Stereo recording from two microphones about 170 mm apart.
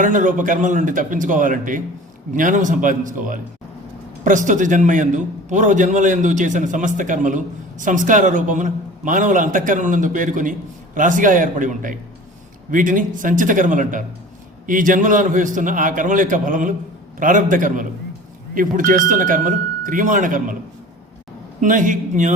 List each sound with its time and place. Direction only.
0.0 s a man's voice: 50° right (ahead or behind)
21.6 s a man's voice: 50° right (ahead or behind)